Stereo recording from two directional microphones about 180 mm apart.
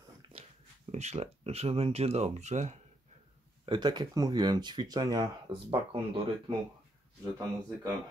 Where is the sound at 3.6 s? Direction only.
25° right (ahead or behind).